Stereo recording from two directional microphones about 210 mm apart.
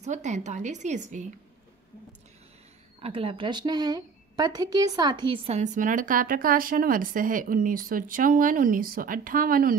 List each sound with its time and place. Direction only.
0.0 s a woman's voice: 35° right (ahead or behind)
3.0 s a woman's voice: 25° right (ahead or behind); by 9.8 s 40° right (ahead or behind)